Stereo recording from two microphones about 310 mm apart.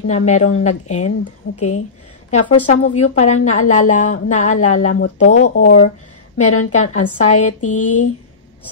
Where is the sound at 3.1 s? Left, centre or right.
Left.